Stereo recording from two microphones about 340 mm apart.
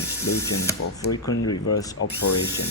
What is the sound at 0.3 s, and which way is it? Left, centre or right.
Speech, left.